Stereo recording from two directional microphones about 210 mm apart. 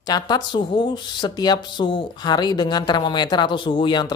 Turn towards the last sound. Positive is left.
turn(degrees=20)  # may be behind; listen again after turning